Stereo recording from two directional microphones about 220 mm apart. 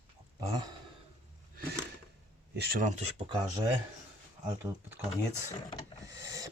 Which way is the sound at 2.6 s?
45° right (ahead or behind).